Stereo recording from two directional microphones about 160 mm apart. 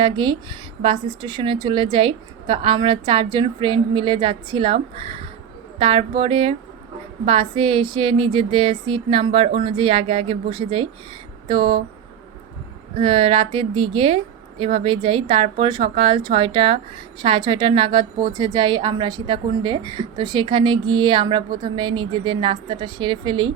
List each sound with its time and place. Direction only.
0.0 s a woman's voice: 30° right (ahead or behind)
13.0 s a woman's voice: 35° right (ahead or behind)